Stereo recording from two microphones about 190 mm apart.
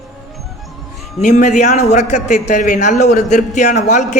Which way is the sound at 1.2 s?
40° left (ahead or behind).